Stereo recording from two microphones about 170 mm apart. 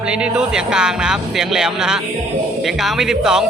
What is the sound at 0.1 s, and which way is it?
Speech, 5° right (ahead or behind).